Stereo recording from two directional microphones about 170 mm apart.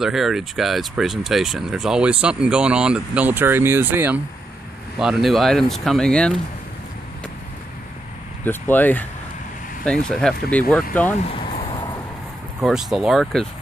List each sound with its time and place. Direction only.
0.0 s speech: centre (ahead or behind)
8.5 s speech: 10° left (ahead or behind)
11.2 s a sound: 30° left (ahead or behind)
12.5 s speech: centre (ahead or behind)